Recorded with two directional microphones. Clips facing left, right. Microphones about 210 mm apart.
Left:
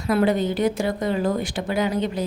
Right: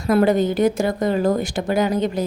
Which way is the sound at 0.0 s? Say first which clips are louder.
Right 4 dB; 45° right (ahead or behind).